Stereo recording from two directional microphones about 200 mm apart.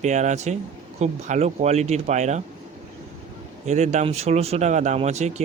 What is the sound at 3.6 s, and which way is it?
Speech, 35° right (ahead or behind).